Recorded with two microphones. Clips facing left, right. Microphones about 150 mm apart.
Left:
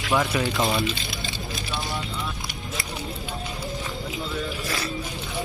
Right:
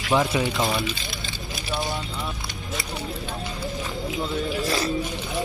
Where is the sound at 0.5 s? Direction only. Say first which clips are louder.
Left 1 dB; centre (ahead or behind).